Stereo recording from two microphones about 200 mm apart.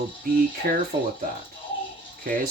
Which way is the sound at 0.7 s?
45° right (ahead or behind).